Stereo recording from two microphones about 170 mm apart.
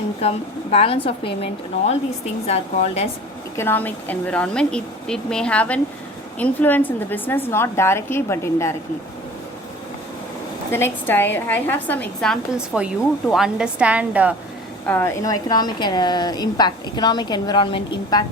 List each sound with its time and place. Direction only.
0.2 s a woman's voice: 40° left (ahead or behind)
2.5 s a woman's voice: 40° left (ahead or behind)
3.6 s a woman's voice: 10° left (ahead or behind)
10.7 s a woman's voice: 15° left (ahead or behind); by 14.3 s 10° right (ahead or behind)
14.8 s a woman's voice: 15° left (ahead or behind)